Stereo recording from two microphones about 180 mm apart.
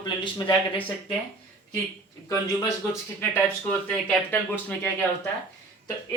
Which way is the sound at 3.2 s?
10° left (ahead or behind).